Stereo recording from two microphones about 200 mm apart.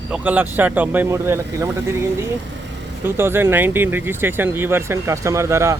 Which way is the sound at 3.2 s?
10° right (ahead or behind).